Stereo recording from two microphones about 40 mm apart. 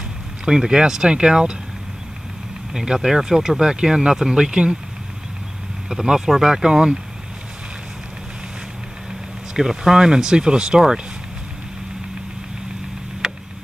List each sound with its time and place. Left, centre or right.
0.5 s speech: centre
2.7 s speech: centre
5.9 s speech: centre
9.5 s speech: centre
13.2 s vehicle: centre